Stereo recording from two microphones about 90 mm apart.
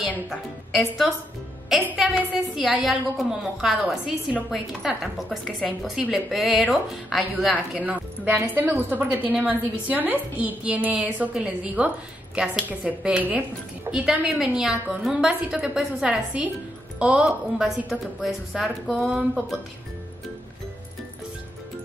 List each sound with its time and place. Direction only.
0.3 s a woman's voice: centre (ahead or behind)
7.7 s a woman's voice: 20° right (ahead or behind); by 19.0 s centre (ahead or behind)
19.0 s a woman's voice: 15° right (ahead or behind)